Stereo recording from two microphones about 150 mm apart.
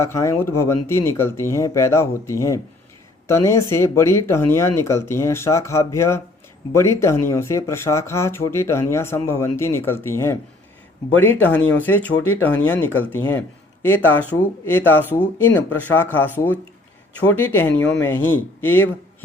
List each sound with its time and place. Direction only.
0.0 s speech: 20° left (ahead or behind)